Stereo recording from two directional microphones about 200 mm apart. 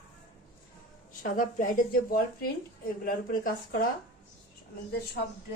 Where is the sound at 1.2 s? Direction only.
45° left (ahead or behind).